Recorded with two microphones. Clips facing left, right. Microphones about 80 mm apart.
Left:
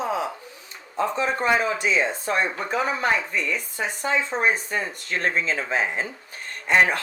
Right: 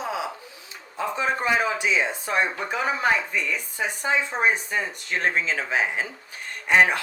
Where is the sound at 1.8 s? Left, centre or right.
Centre.